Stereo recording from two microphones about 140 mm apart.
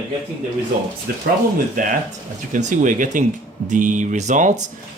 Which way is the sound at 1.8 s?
65° right (ahead or behind).